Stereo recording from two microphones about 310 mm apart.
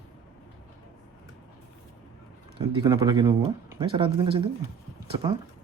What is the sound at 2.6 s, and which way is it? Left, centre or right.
Speech, centre.